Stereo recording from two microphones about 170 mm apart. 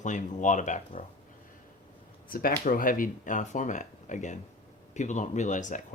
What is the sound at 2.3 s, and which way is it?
Speech, 60° left (ahead or behind).